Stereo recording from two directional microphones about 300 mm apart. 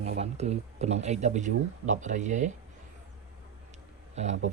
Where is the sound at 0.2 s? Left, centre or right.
Right.